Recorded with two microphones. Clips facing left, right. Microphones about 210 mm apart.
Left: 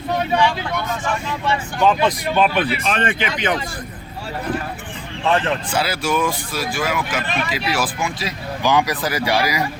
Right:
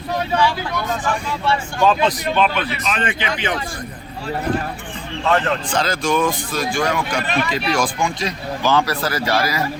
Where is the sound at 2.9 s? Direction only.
45° left (ahead or behind).